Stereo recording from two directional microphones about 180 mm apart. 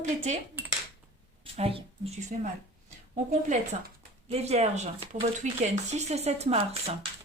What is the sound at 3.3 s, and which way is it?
Speech, 45° right (ahead or behind).